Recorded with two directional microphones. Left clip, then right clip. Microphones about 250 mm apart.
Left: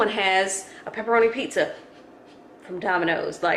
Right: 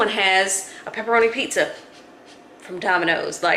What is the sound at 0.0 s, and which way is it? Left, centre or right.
A woman's voice, centre.